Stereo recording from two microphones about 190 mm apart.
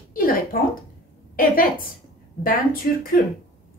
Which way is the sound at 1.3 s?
50° left (ahead or behind).